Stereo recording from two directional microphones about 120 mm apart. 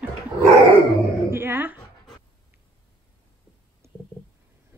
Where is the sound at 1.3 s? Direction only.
20° right (ahead or behind).